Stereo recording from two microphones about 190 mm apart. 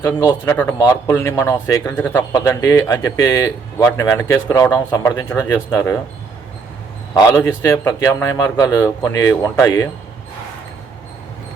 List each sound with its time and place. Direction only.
0.0 s speech: 15° left (ahead or behind)
7.1 s speech: 15° left (ahead or behind)